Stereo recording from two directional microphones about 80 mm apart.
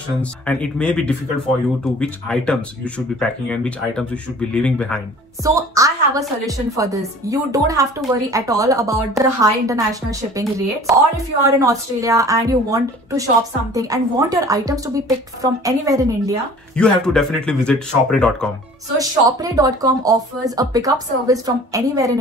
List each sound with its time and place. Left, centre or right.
0.2 s speech: centre
5.4 s a woman's voice: right
16.7 s speech: centre
18.9 s a woman's voice: right